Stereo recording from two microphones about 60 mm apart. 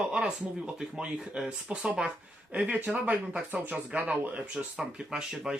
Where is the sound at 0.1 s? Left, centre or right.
Centre.